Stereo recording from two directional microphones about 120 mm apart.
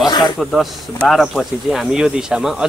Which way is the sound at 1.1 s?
Centre (ahead or behind).